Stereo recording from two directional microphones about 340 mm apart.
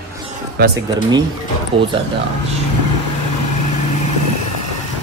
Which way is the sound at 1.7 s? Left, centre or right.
Centre.